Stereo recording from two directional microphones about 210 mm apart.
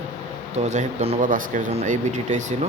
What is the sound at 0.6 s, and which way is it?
Speech, 30° right (ahead or behind).